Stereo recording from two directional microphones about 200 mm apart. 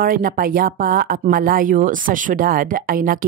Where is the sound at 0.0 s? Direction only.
45° right (ahead or behind).